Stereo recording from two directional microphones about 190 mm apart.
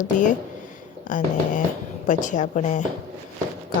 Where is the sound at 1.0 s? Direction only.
45° left (ahead or behind).